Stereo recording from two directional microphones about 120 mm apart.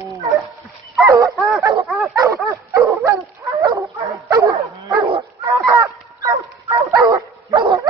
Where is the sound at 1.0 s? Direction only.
30° right (ahead or behind).